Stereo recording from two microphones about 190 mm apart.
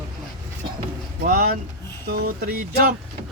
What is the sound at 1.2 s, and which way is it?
Speech, 55° right (ahead or behind).